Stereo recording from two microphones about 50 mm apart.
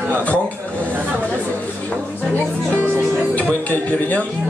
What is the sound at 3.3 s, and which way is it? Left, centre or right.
Music, left.